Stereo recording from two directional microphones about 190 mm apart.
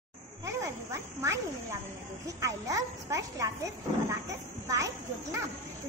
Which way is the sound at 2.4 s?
15° right (ahead or behind).